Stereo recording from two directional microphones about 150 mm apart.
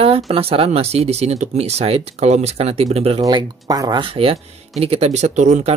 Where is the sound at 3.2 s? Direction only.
25° right (ahead or behind); by 5.7 s 50° right (ahead or behind).